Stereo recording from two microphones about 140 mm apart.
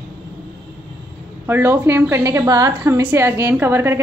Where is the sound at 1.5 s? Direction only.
20° right (ahead or behind).